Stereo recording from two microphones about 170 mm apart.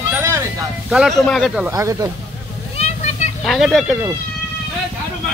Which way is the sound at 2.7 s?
40° left (ahead or behind).